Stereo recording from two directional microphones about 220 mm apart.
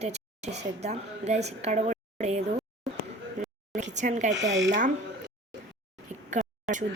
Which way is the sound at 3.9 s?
35° right (ahead or behind).